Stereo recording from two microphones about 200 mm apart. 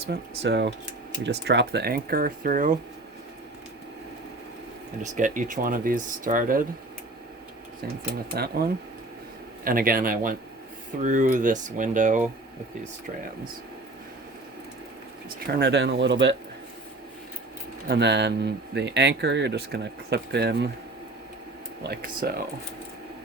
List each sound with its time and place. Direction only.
0.1 s speech: 55° right (ahead or behind); by 2.7 s 40° right (ahead or behind)
5.1 s speech: 40° right (ahead or behind)
8.3 s speech: 50° right (ahead or behind)
9.6 s speech: 45° right (ahead or behind)
15.5 s speech: 60° right (ahead or behind)
17.8 s speech: 55° right (ahead or behind)
21.8 s speech: 50° right (ahead or behind)